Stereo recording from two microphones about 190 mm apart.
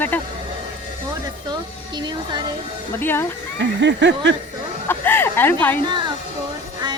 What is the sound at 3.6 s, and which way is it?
Snicker, 70° right (ahead or behind).